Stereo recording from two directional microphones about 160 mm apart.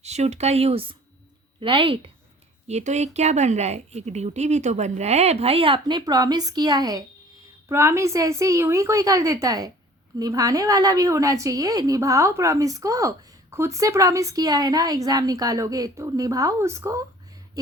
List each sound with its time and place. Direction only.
0.0 s speech: 45° right (ahead or behind)
2.6 s a woman's voice: 45° right (ahead or behind); by 17.0 s 20° right (ahead or behind)